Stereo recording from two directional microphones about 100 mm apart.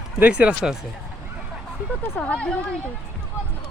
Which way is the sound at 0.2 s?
15° right (ahead or behind).